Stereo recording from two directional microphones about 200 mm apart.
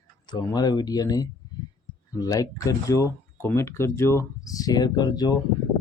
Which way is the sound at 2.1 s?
20° left (ahead or behind).